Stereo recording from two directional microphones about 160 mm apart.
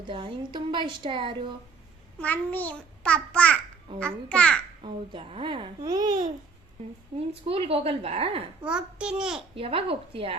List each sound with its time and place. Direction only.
0.0 s speech: 30° right (ahead or behind)
2.2 s a child's voice: 10° left (ahead or behind)
4.8 s a child's voice: 35° right (ahead or behind)
7.1 s a child's voice: 40° right (ahead or behind)
8.6 s a child's voice: 5° right (ahead or behind)
9.6 s a child's voice: 35° right (ahead or behind)